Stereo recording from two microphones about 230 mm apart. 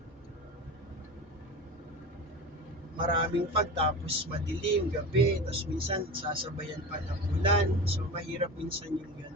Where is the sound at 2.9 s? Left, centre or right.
Right.